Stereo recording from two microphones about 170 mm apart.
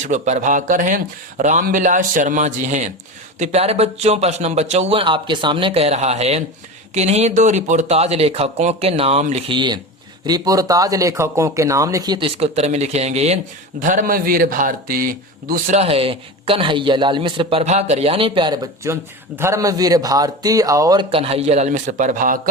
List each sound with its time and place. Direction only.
0.0 s a man's voice: 45° right (ahead or behind)